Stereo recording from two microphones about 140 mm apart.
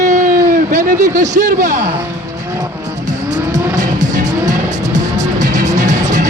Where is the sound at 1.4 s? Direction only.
65° right (ahead or behind).